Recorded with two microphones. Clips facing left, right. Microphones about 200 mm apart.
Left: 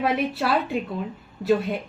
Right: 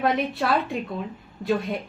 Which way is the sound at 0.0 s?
5° left (ahead or behind).